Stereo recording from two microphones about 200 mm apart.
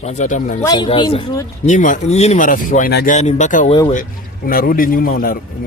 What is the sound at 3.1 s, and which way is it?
Speech, 35° left (ahead or behind).